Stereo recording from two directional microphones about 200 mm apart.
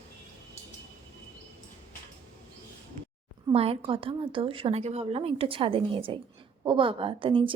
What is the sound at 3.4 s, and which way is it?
A woman's voice, 30° right (ahead or behind).